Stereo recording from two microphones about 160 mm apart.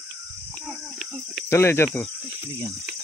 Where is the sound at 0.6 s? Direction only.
Centre (ahead or behind).